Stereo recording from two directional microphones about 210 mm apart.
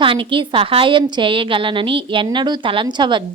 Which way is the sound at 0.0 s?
25° right (ahead or behind).